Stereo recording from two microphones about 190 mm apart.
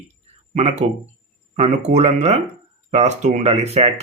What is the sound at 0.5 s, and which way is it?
Speech, 35° right (ahead or behind).